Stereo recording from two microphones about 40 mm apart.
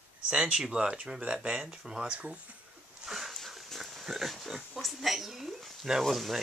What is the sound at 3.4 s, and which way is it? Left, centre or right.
Dog, centre.